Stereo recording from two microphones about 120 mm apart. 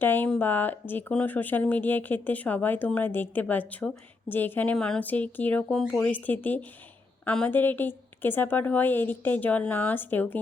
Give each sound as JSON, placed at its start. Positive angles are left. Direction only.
{"t": 0.0, "sound": "speech", "side_deg": 15}